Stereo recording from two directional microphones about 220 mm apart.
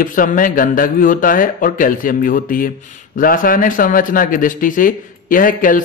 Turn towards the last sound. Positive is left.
turn(degrees=40)  # may be behind; listen again after turning